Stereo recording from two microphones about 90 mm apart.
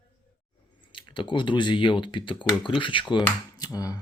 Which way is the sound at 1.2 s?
60° left (ahead or behind).